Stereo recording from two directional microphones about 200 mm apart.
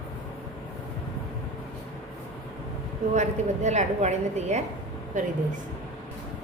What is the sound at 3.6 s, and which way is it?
A woman's voice, 35° right (ahead or behind).